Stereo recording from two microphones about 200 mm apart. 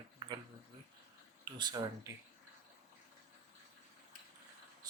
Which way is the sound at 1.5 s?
20° right (ahead or behind).